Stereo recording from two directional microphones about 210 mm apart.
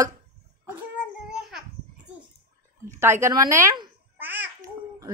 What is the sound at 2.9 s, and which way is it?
Babbling, 10° right (ahead or behind).